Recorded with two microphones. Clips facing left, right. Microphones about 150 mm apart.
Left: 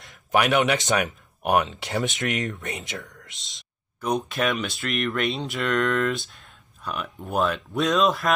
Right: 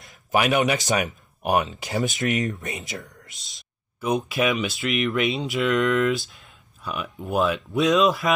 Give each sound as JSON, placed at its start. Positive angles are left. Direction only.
{"t": 0.0, "sound": "speech", "side_deg": 0}
{"t": 3.3, "sound": "speech", "side_deg": -45}
{"t": 4.0, "sound": "speech", "side_deg": -5}